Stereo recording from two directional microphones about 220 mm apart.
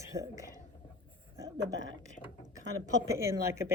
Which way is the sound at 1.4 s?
15° right (ahead or behind).